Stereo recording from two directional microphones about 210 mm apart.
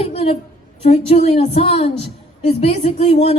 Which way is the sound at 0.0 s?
30° left (ahead or behind).